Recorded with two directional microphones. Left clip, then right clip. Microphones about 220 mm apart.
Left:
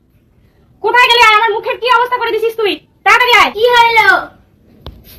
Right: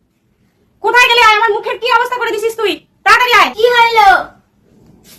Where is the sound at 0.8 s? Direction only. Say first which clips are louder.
Even; 15° right (ahead or behind).